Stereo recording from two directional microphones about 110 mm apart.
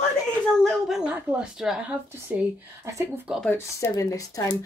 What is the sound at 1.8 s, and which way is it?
Speech, 15° right (ahead or behind).